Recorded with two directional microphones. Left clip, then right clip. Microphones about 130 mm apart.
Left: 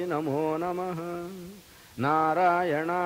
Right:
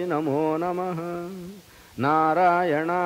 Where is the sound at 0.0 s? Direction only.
30° right (ahead or behind).